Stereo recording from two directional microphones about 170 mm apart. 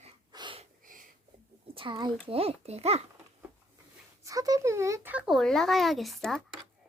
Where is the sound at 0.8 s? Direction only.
55° right (ahead or behind).